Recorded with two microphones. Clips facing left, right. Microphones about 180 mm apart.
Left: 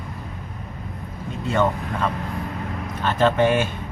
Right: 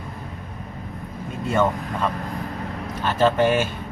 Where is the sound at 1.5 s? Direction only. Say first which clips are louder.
Even; 5° right (ahead or behind).